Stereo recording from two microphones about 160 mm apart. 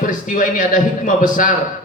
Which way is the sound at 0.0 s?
55° left (ahead or behind).